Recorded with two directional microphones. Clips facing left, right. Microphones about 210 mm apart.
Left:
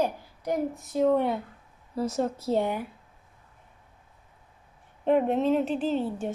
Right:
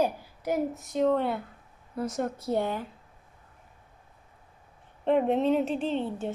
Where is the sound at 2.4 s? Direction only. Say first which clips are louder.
Left 2 dB; 20° left (ahead or behind).